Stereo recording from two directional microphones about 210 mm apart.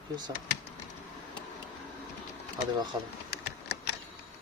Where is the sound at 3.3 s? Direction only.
50° left (ahead or behind).